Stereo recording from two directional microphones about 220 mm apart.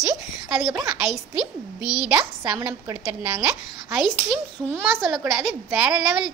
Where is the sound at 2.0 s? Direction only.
5° right (ahead or behind).